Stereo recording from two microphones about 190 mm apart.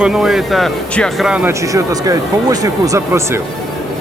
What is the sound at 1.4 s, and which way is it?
Speech, 20° right (ahead or behind).